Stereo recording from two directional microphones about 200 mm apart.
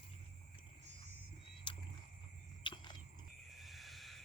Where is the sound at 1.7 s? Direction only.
25° left (ahead or behind).